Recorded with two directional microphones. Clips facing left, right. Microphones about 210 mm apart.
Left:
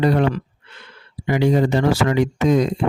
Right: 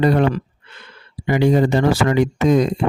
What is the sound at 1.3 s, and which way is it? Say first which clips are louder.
Speech: right 2 dB; 50° right (ahead or behind).